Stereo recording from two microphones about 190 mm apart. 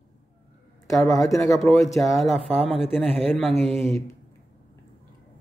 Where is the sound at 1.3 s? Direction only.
Centre (ahead or behind).